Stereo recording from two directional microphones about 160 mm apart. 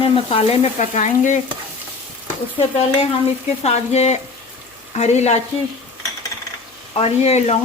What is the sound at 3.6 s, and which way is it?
Speech, 45° left (ahead or behind).